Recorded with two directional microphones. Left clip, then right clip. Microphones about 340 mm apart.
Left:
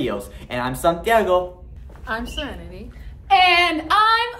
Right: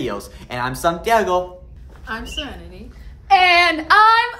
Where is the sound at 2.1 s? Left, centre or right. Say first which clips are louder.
Left 1 dB; centre.